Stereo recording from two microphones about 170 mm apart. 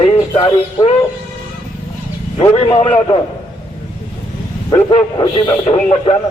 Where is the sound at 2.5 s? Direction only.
35° left (ahead or behind).